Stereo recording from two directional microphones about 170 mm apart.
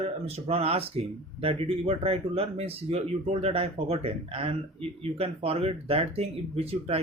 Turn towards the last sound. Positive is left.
turn(degrees=-35)  # may be behind; listen again after turning